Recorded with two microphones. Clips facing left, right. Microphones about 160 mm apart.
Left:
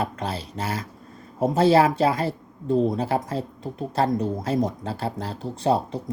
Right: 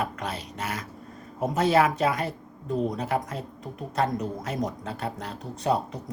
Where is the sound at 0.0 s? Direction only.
30° left (ahead or behind).